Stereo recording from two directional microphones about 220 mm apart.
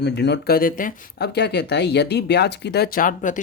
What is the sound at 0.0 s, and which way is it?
Speech, 50° left (ahead or behind).